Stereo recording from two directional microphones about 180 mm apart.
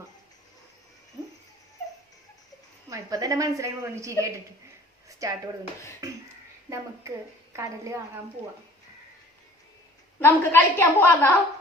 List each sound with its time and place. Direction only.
2.9 s a woman's voice: 20° right (ahead or behind)
5.0 s a sound: 20° right (ahead or behind)
6.7 s a woman's voice: 15° right (ahead or behind)
10.2 s a woman's voice: 10° left (ahead or behind)